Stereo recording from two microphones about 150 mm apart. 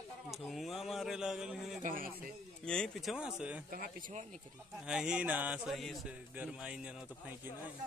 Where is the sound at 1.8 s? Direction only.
70° right (ahead or behind).